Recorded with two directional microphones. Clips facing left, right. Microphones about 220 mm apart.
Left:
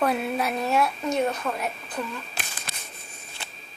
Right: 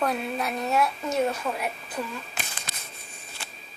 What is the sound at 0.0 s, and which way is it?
Speech, 5° left (ahead or behind).